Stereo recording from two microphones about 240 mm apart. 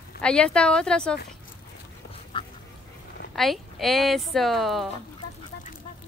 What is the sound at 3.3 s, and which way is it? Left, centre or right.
A woman's voice, centre.